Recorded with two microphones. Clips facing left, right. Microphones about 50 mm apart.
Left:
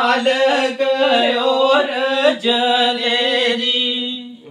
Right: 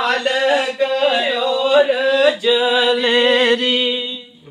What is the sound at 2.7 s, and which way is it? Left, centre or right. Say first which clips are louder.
Mantra: right 1 dB; centre.